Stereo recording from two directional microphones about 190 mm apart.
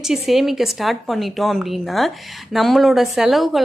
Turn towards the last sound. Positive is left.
turn(degrees=0)  # may be behind; listen again after turning